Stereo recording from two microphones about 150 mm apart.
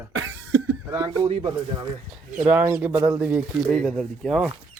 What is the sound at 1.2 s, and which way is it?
Speech, 40° right (ahead or behind).